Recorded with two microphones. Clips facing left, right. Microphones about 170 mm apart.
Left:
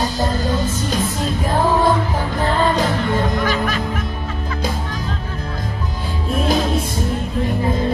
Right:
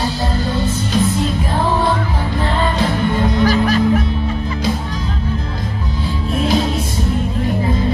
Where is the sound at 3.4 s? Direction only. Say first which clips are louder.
Right 6 dB; 35° right (ahead or behind).